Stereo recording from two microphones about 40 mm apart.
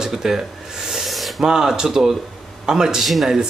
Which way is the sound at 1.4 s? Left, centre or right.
Centre.